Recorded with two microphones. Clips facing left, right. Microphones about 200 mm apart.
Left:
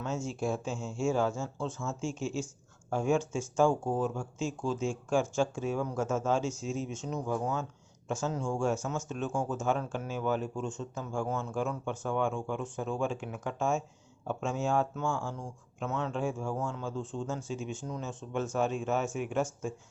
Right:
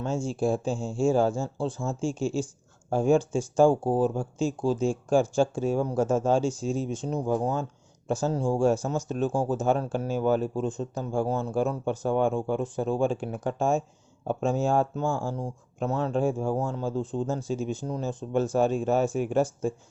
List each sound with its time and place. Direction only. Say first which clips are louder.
0.0 s speech: right 6 dB; 30° right (ahead or behind)